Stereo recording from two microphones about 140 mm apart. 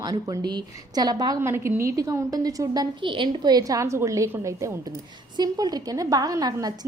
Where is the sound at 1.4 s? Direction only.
20° right (ahead or behind).